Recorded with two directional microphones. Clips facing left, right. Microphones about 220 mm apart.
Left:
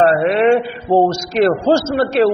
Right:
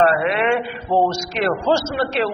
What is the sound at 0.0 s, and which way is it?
A man's voice, 35° left (ahead or behind).